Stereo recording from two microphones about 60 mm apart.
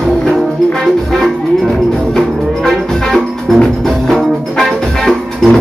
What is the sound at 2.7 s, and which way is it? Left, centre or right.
Music, centre.